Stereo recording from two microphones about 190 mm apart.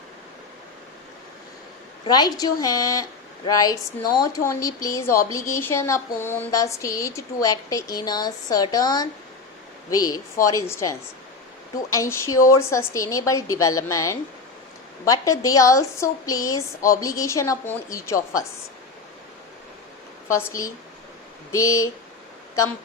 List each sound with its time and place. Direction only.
2.0 s a woman's voice: 20° left (ahead or behind)
11.9 s speech: 15° left (ahead or behind)
20.2 s speech: 15° left (ahead or behind)